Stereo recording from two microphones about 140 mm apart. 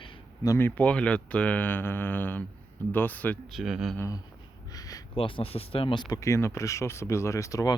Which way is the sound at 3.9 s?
25° left (ahead or behind).